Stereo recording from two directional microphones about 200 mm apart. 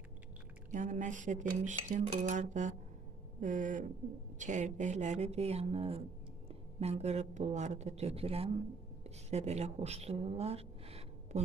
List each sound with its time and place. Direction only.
0.7 s a woman's voice: 40° right (ahead or behind)